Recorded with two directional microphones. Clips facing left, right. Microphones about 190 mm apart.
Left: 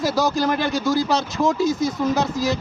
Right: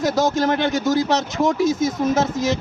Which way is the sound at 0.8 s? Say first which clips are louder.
Right 1 dB; 20° right (ahead or behind).